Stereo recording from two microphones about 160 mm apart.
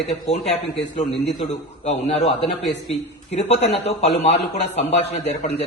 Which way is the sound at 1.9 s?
40° left (ahead or behind).